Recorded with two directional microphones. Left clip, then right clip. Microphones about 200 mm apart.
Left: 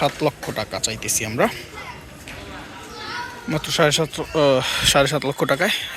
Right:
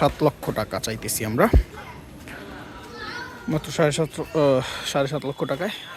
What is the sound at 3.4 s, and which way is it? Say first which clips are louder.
Speech: left 4 dB; 20° right (ahead or behind).